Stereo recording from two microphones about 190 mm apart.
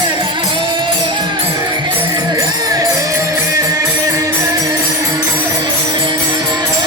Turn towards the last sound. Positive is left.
turn(degrees=-25)  # may be behind; listen again after turning